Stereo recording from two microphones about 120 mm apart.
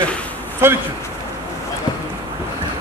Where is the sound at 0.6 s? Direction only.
20° right (ahead or behind).